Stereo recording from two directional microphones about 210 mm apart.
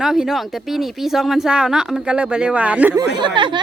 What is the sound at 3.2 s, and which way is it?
Speech, 20° right (ahead or behind).